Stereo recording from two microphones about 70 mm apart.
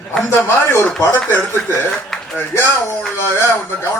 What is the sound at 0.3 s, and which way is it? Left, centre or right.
Speech, left.